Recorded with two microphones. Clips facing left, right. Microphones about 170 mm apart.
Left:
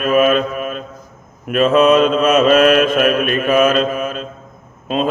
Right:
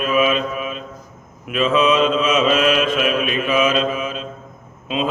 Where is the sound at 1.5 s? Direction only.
50° left (ahead or behind).